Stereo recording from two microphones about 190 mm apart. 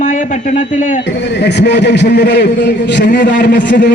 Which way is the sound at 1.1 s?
65° left (ahead or behind).